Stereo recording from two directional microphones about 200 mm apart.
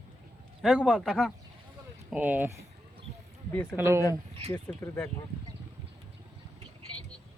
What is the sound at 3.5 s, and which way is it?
Speech, 10° left (ahead or behind).